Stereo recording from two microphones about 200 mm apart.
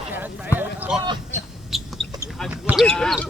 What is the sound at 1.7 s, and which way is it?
Bird, centre (ahead or behind).